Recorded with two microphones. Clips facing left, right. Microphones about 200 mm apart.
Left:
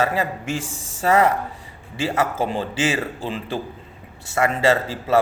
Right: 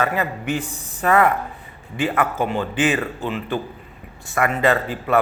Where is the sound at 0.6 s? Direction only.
90° left.